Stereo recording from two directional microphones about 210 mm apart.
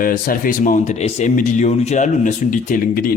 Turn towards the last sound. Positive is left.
turn(degrees=45)  # may be behind; listen again after turning